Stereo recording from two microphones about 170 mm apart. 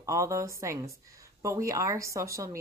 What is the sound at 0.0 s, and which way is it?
A woman's voice, 20° right (ahead or behind).